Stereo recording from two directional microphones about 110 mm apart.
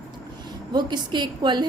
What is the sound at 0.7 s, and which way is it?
Speech, 40° right (ahead or behind).